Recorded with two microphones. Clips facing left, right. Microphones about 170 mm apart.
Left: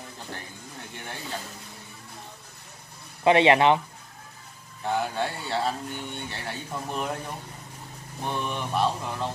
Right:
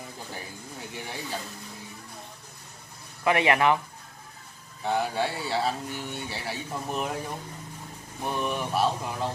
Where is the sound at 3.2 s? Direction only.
25° left (ahead or behind).